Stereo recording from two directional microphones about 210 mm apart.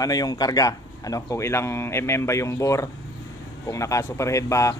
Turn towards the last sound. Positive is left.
turn(degrees=15)  # may be behind; listen again after turning